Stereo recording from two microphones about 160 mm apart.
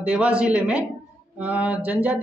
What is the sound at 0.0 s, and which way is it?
Speech, 10° right (ahead or behind).